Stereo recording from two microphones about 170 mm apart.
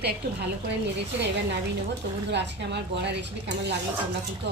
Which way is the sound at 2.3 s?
90° right.